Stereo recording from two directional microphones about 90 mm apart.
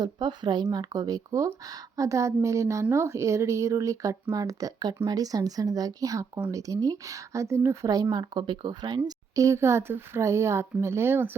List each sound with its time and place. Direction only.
0.0 s speech: 55° right (ahead or behind); by 7.9 s 35° right (ahead or behind)
8.1 s speech: 55° right (ahead or behind)
9.0 s speech: 40° right (ahead or behind)